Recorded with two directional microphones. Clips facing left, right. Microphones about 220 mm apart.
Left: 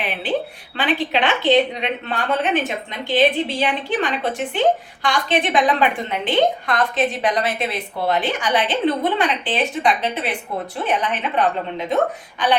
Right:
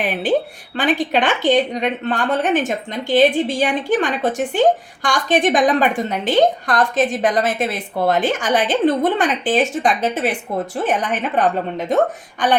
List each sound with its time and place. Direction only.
0.0 s a woman's voice: 45° right (ahead or behind)